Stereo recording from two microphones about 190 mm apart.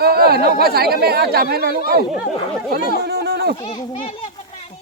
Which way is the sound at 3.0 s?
60° right (ahead or behind).